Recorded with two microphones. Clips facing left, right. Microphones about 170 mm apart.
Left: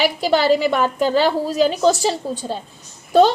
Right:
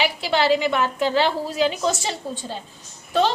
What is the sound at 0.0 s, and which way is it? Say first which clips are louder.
A woman's voice: left 4 dB; 40° left (ahead or behind).